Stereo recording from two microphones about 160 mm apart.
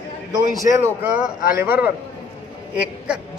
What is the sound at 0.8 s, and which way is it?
A man's voice, 10° right (ahead or behind).